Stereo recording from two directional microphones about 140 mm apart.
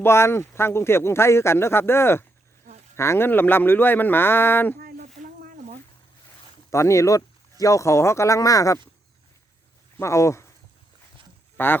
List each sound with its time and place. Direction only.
0.0 s speech: 20° left (ahead or behind)
4.8 s a sound: 90° right
6.7 s speech: 20° left (ahead or behind)
10.0 s speech: 20° left (ahead or behind)
11.5 s speech: 15° left (ahead or behind)